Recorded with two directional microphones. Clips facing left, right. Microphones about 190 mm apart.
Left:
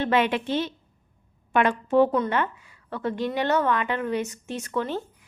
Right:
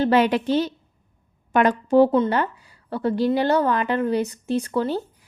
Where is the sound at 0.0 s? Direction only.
40° right (ahead or behind).